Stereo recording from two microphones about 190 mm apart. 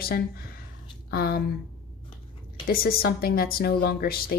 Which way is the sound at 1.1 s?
55° left (ahead or behind).